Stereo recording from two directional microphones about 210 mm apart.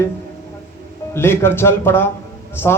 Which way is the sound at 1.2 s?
10° left (ahead or behind).